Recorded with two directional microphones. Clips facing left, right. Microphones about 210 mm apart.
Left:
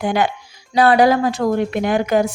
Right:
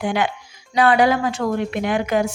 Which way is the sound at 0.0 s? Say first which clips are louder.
Left 3 dB; 40° left (ahead or behind).